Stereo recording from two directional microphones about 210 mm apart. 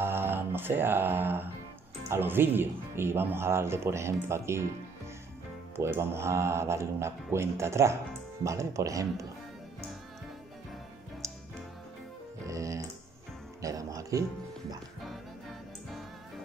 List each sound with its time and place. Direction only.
0.0 s mantra: 10° right (ahead or behind)
2.0 s speech: 10° right (ahead or behind)
5.8 s speech: 10° right (ahead or behind)
12.4 s music: 15° right (ahead or behind)